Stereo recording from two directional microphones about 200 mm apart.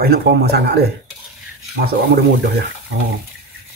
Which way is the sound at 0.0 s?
50° right (ahead or behind).